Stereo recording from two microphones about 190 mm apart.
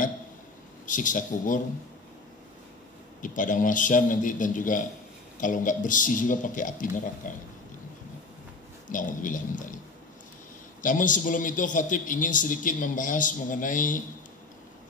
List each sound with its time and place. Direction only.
0.8 s a man's voice: 45° left (ahead or behind)
3.2 s a man's voice: 45° left (ahead or behind)
8.8 s a woman's voice: 45° left (ahead or behind)
10.8 s a man's voice: 45° left (ahead or behind)